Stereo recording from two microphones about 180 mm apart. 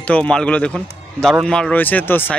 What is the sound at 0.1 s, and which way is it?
Speech, 5° left (ahead or behind).